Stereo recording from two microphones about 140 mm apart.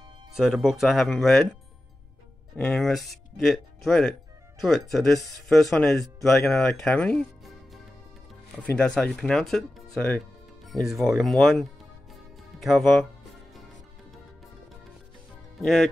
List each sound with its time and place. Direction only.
0.3 s speech: 5° right (ahead or behind)
15.5 s speech: centre (ahead or behind)